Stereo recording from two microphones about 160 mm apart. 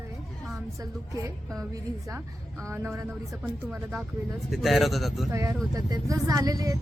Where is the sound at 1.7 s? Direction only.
15° right (ahead or behind); by 5.3 s centre (ahead or behind).